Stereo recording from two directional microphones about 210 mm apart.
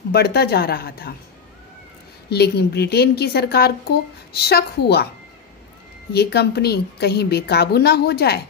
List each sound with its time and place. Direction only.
0.1 s a woman's voice: 50° left (ahead or behind)
2.2 s a woman's voice: 50° left (ahead or behind)
6.1 s a woman's voice: 50° left (ahead or behind)